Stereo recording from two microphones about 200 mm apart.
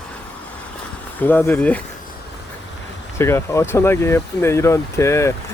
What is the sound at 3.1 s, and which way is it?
Speech, 15° left (ahead or behind).